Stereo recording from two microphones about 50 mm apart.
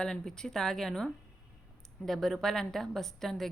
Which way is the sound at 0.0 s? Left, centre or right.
Centre.